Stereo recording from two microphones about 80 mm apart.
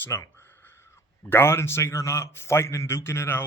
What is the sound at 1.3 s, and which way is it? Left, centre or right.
A man's voice, left.